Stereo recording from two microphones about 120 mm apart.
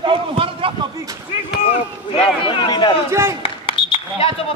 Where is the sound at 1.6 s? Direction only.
55° left (ahead or behind).